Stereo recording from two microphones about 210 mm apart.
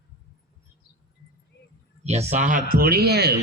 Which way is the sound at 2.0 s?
30° right (ahead or behind).